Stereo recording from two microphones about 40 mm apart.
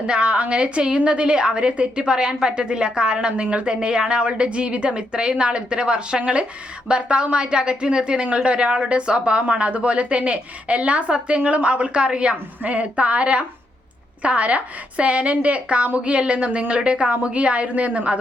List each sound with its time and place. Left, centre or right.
0.1 s speech: right